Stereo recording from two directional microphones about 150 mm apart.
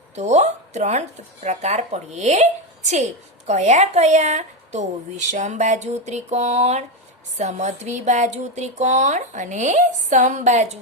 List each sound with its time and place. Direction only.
0.2 s speech: 50° right (ahead or behind)